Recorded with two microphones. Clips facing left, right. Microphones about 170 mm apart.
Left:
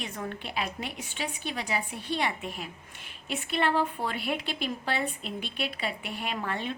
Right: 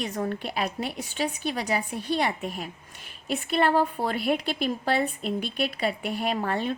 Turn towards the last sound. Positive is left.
turn(degrees=-40)  # may be behind; listen again after turning